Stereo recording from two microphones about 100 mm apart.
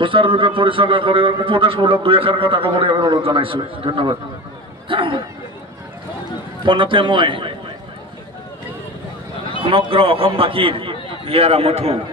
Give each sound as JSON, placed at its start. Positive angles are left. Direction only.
{"t": 0.0, "sound": "a man's voice", "side_deg": -60}
{"t": 4.8, "sound": "a sound", "side_deg": -60}
{"t": 6.6, "sound": "a man's voice", "side_deg": -60}
{"t": 9.7, "sound": "a man's voice", "side_deg": -65}